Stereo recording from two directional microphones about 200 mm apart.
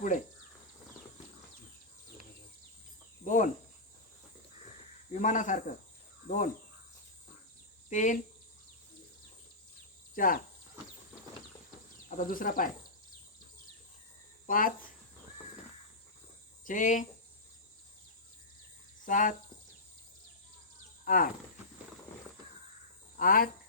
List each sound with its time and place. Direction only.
3.2 s cricket: 40° left (ahead or behind)
5.1 s speech: 40° left (ahead or behind)
7.9 s speech: 40° left (ahead or behind)
10.2 s speech: 45° left (ahead or behind)
12.0 s speech: 45° left (ahead or behind)
14.4 s speech: 45° left (ahead or behind)
16.6 s speech: 40° left (ahead or behind)
19.0 s speech: 40° left (ahead or behind)
21.0 s speech: 45° left (ahead or behind)
23.1 s speech: 45° left (ahead or behind)